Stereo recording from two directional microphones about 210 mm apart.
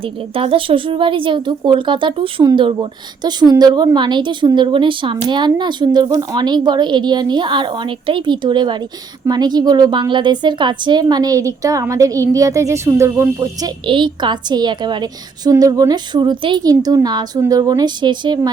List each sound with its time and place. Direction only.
0.0 s a woman's voice: 25° right (ahead or behind)